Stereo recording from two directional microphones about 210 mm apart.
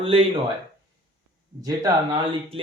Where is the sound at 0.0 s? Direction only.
25° right (ahead or behind).